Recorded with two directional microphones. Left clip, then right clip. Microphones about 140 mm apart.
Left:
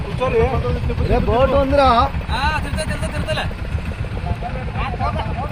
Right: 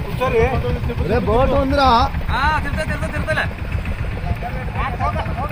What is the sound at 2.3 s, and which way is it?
Speech, 20° left (ahead or behind).